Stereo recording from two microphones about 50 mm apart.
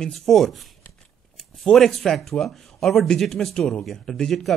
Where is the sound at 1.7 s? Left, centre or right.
Centre.